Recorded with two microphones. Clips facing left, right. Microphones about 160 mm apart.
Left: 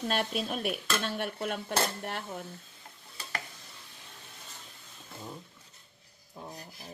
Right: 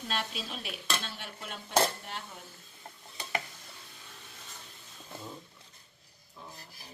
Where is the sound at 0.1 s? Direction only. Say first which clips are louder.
Left 4 dB; 55° left (ahead or behind).